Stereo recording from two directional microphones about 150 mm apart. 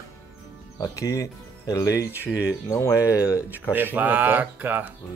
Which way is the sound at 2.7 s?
20° left (ahead or behind).